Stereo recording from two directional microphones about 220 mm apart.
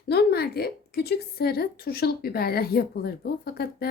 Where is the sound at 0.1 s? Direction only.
45° left (ahead or behind).